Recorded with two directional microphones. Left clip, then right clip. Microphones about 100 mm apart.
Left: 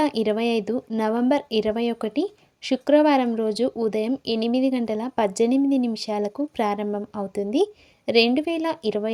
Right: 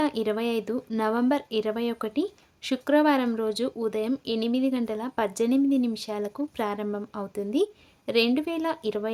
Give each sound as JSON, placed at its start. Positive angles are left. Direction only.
{"t": 0.0, "sound": "speech", "side_deg": 35}